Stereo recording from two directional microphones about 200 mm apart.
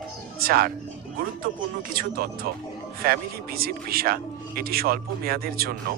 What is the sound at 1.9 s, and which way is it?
Speech, 50° right (ahead or behind).